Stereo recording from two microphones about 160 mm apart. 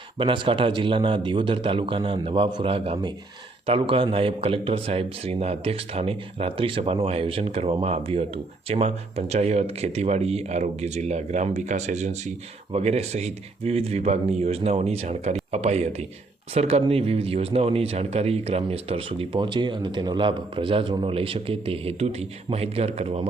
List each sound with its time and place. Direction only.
0.2 s speech: 30° right (ahead or behind)